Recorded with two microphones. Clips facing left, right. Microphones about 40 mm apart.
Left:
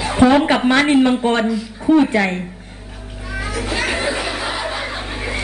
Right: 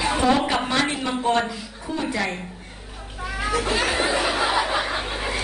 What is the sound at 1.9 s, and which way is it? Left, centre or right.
Speech, left.